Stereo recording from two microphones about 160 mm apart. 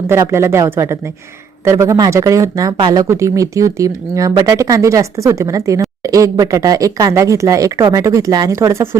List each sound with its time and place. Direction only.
0.1 s speech: 15° right (ahead or behind)